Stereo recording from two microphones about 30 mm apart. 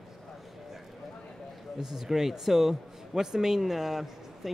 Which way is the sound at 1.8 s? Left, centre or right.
Centre.